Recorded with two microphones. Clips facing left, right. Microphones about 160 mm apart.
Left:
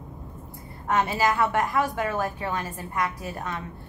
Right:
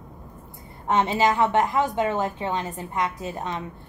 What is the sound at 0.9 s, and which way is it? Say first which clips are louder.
A woman's voice: right 3 dB; 20° right (ahead or behind).